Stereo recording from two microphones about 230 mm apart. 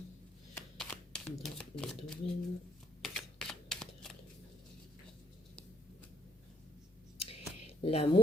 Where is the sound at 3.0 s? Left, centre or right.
Centre.